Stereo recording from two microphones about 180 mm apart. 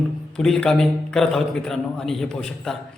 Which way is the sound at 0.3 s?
5° left (ahead or behind).